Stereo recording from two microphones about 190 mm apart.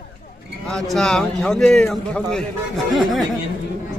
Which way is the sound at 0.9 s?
5° left (ahead or behind).